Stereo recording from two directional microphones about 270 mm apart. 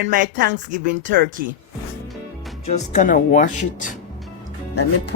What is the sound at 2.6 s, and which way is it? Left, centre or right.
Speech, left.